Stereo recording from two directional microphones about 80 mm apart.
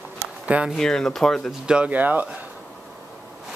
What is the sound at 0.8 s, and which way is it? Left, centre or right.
Speech, centre.